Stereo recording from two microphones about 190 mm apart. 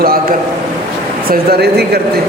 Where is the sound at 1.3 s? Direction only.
55° right (ahead or behind).